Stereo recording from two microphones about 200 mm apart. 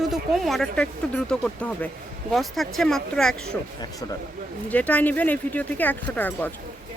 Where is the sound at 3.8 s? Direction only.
20° left (ahead or behind).